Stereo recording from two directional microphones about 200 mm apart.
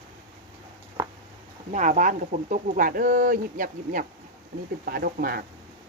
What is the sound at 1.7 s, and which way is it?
Speech, 40° right (ahead or behind).